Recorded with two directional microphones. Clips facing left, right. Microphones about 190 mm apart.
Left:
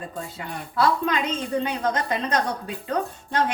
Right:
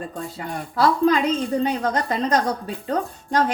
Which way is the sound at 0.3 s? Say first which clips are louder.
Right 2 dB; 35° right (ahead or behind).